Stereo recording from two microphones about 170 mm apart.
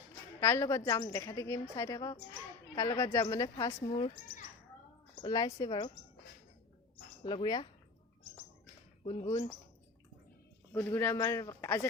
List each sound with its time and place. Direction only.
0.3 s a man's voice: 15° left (ahead or behind)
3.8 s a woman's voice: 30° left (ahead or behind)
7.3 s a woman's voice: 25° left (ahead or behind)
9.0 s speech: 40° left (ahead or behind)
10.7 s a man's voice: 15° left (ahead or behind)